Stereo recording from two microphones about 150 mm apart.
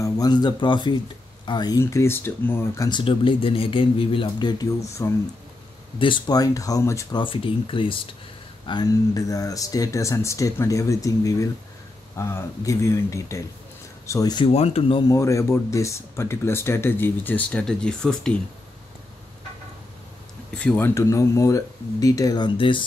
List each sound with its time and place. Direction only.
0.0 s speech: 25° left (ahead or behind)
5.9 s speech: 35° left (ahead or behind)
14.5 s speech: 45° left (ahead or behind)
15.0 s speech: 20° left (ahead or behind); by 18.3 s 5° left (ahead or behind)
20.5 s speech: 10° left (ahead or behind); by 22.8 s 35° left (ahead or behind)